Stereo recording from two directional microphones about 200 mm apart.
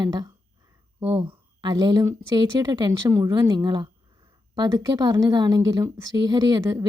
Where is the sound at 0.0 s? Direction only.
20° right (ahead or behind).